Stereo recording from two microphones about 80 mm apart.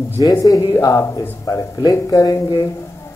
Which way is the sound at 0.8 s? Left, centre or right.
Left.